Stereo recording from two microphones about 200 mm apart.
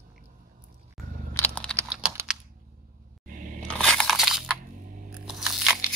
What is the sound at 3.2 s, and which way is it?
Scrape, 40° right (ahead or behind).